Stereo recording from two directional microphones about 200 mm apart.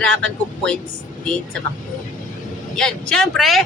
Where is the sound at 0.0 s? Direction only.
5° left (ahead or behind).